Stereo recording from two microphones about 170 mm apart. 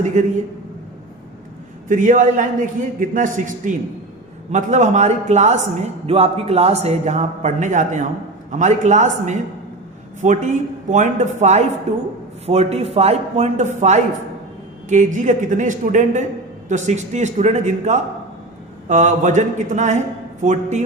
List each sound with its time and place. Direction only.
0.0 s a man's voice: 45° right (ahead or behind)
1.9 s a man's voice: 50° right (ahead or behind)
14.8 s a man's voice: 45° right (ahead or behind)